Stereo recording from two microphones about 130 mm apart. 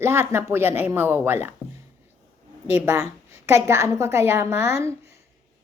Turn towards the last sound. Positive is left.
turn(degrees=-20)  # may be behind; listen again after turning